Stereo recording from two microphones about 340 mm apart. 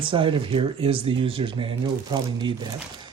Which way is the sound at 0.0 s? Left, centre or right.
Centre.